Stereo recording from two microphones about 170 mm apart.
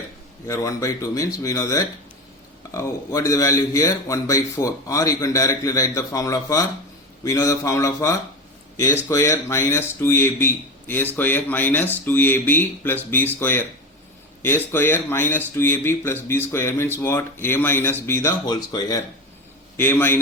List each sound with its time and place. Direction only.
0.4 s a man's voice: 20° left (ahead or behind)